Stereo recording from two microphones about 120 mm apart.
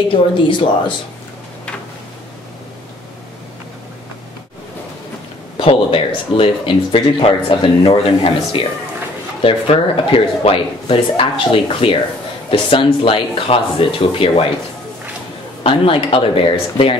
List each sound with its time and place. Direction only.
0.1 s speech: 40° left (ahead or behind)
5.6 s speech: 50° left (ahead or behind)
15.6 s speech: 50° left (ahead or behind)